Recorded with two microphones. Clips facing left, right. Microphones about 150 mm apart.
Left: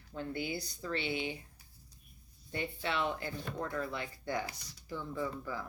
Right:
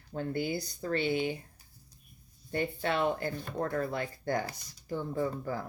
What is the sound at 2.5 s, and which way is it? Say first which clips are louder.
Speech: right 5 dB; 45° right (ahead or behind).